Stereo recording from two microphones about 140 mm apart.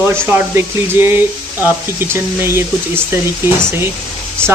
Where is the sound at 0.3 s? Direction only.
15° right (ahead or behind).